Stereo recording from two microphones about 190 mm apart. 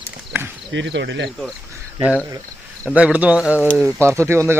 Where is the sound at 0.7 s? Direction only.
70° right (ahead or behind).